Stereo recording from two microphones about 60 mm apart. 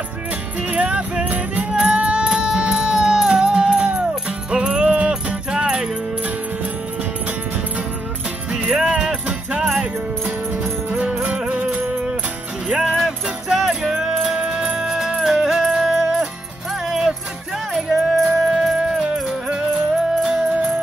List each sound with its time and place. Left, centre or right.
0.6 s music: centre
8.5 s jingle bell: right
10.2 s music: right
12.6 s jingle bell: centre
14.2 s music: centre
20.2 s music: centre